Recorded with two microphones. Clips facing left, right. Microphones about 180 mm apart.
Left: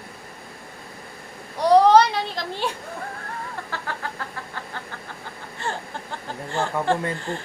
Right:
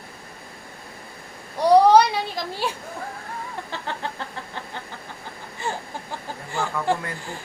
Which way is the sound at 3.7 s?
25° right (ahead or behind).